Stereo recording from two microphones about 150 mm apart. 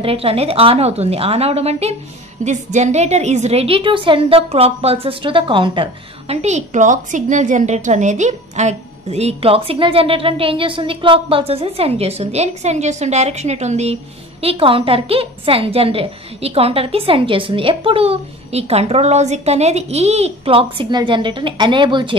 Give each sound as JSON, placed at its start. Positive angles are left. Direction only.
{"t": 0.0, "sound": "a woman's voice", "side_deg": -40}